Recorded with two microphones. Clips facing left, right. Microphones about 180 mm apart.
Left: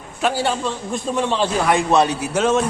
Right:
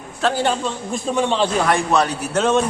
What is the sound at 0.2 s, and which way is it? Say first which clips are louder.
A man's voice: right 1 dB; 10° left (ahead or behind).